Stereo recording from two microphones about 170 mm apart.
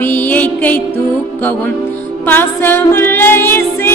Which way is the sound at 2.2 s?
10° left (ahead or behind).